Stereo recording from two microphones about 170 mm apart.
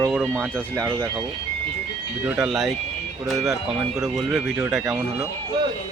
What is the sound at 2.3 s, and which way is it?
Speech, centre (ahead or behind).